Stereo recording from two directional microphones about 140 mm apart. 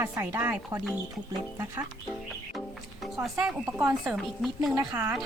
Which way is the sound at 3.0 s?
Centre (ahead or behind).